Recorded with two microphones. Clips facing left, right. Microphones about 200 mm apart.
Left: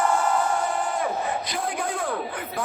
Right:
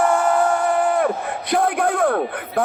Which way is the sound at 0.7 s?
60° right (ahead or behind).